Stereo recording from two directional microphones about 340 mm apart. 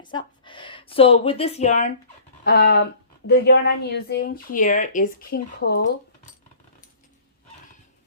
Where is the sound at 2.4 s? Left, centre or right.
Left.